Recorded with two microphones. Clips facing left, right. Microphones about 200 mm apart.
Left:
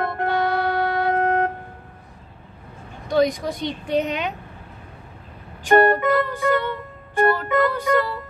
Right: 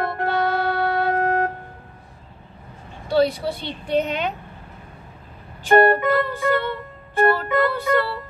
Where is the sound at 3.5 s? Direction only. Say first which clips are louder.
Left 1 dB; 15° left (ahead or behind).